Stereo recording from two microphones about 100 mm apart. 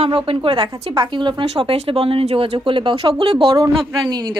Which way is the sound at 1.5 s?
80° right.